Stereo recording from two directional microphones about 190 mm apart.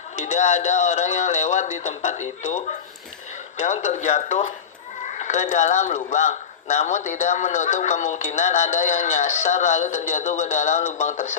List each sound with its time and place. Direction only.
0.2 s speech: 40° left (ahead or behind)